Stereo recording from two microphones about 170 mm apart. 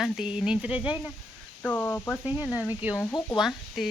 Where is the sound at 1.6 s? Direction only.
10° left (ahead or behind).